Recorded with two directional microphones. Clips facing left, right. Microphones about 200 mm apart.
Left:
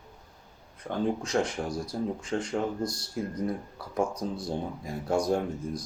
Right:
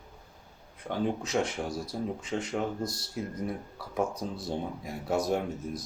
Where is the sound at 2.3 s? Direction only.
25° right (ahead or behind).